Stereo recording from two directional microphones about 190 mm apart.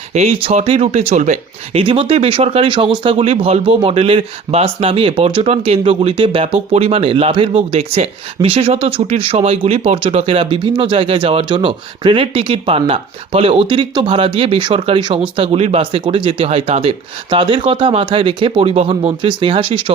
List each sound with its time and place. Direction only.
0.1 s speech: 35° right (ahead or behind)